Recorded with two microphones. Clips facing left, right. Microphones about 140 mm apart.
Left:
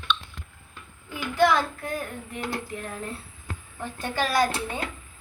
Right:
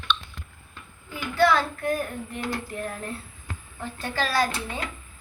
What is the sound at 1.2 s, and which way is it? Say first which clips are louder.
Child singing: even; 15° left (ahead or behind).